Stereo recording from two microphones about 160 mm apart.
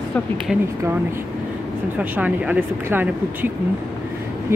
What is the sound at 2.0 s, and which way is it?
Speech, 10° right (ahead or behind).